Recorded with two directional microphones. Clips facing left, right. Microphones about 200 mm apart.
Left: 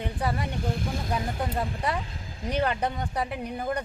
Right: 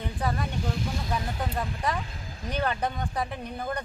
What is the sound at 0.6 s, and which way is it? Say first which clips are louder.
Speech: left 1 dB; 55° left (ahead or behind).